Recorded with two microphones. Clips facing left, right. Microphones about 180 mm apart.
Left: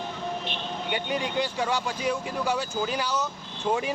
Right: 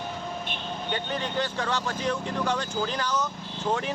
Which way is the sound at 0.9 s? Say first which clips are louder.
Left 2 dB; 10° left (ahead or behind).